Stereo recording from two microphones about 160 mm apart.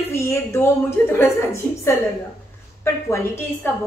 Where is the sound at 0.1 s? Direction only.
15° left (ahead or behind).